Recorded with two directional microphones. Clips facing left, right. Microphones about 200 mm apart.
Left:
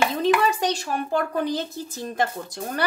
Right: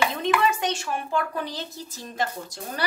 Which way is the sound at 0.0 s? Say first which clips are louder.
Left 3 dB; 35° left (ahead or behind).